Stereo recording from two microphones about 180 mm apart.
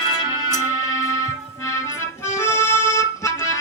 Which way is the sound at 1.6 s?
15° left (ahead or behind).